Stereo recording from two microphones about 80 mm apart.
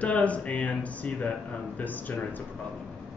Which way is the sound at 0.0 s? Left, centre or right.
Centre.